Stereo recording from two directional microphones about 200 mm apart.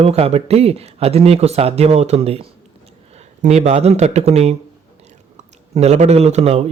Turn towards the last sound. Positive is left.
turn(degrees=-30)  # may be behind; listen again after turning